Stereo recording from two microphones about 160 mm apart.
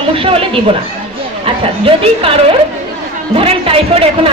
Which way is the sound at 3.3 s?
35° right (ahead or behind).